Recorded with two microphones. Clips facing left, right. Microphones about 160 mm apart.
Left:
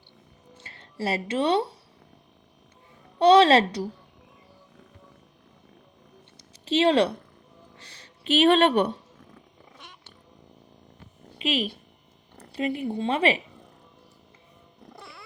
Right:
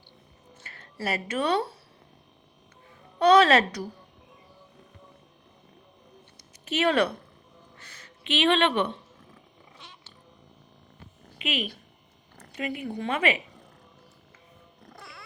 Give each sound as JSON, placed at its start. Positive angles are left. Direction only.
{"t": 0.5, "sound": "speech", "side_deg": 25}
{"t": 3.2, "sound": "speech", "side_deg": 30}
{"t": 6.7, "sound": "speech", "side_deg": 30}
{"t": 7.8, "sound": "a sound", "side_deg": 30}
{"t": 11.3, "sound": "speech", "side_deg": 30}